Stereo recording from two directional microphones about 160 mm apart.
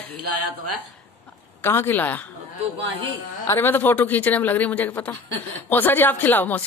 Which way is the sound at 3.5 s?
15° left (ahead or behind).